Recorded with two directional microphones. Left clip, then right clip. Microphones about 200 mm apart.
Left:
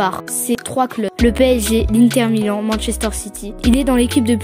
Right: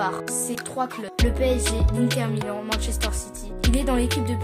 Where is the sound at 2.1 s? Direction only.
40° left (ahead or behind).